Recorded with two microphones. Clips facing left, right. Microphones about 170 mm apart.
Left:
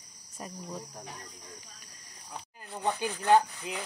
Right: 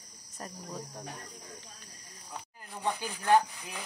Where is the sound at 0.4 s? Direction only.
10° left (ahead or behind).